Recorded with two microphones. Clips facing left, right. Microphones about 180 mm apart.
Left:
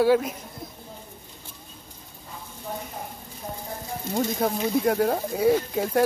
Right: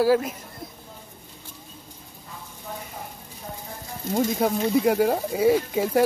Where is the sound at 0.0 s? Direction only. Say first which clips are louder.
Even; centre (ahead or behind).